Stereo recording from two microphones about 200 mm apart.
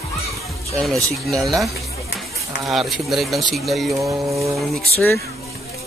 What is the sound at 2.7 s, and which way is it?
Speech, centre (ahead or behind).